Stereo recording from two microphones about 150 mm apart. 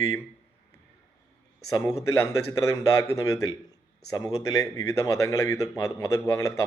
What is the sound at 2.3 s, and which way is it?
Speech, 20° left (ahead or behind).